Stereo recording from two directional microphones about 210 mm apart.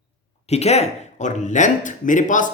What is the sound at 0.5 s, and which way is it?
Speech, 30° left (ahead or behind).